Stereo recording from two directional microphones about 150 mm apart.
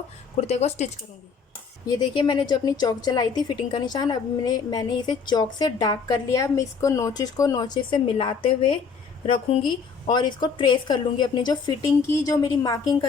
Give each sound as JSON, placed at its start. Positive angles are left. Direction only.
{"t": 0.4, "sound": "speech", "side_deg": 45}
{"t": 1.9, "sound": "a woman's voice", "side_deg": 30}